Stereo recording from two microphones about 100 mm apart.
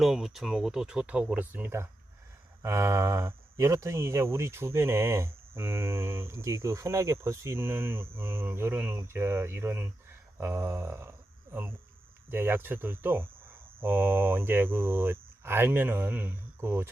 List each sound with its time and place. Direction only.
0.0 s speech: 5° right (ahead or behind); by 11.1 s 25° right (ahead or behind)
12.3 s speech: 20° right (ahead or behind)